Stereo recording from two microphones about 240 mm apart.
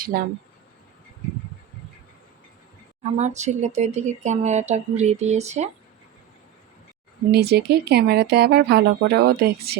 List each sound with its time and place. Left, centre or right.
0.1 s speech: right
3.0 s speech: right
7.3 s speech: right